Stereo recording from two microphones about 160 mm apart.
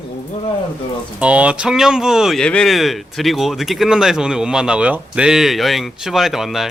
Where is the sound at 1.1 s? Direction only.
10° right (ahead or behind).